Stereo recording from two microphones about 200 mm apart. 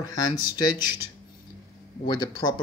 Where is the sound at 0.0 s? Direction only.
20° left (ahead or behind).